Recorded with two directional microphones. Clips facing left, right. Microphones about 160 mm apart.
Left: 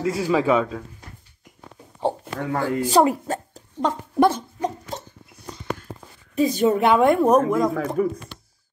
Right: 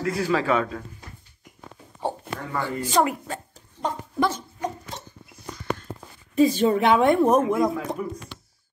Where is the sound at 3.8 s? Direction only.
60° left (ahead or behind).